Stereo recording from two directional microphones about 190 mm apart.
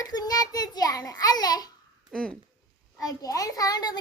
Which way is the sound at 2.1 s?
5° left (ahead or behind).